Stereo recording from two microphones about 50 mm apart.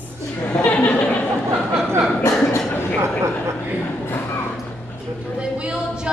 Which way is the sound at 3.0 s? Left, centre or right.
Right.